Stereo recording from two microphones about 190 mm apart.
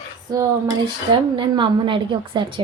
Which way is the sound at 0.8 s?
25° right (ahead or behind).